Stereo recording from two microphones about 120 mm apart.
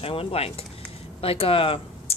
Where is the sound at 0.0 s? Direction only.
50° left (ahead or behind).